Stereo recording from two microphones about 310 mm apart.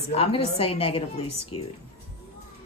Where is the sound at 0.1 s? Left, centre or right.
Centre.